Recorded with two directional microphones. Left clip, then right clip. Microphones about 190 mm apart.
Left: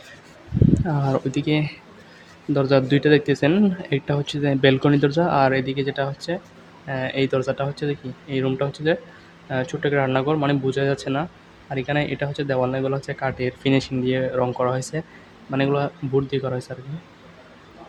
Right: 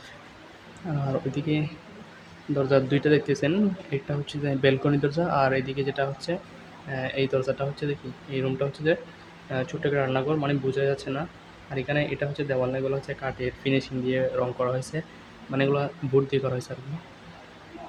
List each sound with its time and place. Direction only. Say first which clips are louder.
1.0 s speech: left 6 dB; 30° left (ahead or behind); by 16.7 s 15° left (ahead or behind)